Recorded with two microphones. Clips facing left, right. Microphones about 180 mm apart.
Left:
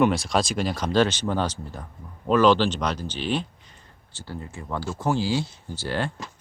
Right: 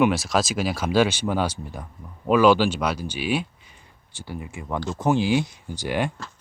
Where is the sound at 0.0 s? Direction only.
5° right (ahead or behind).